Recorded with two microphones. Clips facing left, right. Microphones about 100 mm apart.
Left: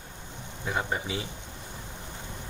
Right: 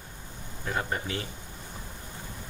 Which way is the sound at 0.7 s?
15° left (ahead or behind).